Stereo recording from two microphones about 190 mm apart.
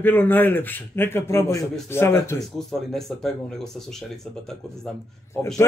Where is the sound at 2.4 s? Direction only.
Centre (ahead or behind).